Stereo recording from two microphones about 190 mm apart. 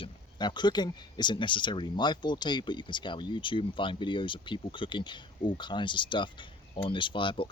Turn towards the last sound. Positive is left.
turn(degrees=25)  # may be behind; listen again after turning